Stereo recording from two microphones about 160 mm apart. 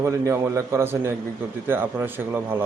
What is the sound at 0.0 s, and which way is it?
Speech, 15° right (ahead or behind).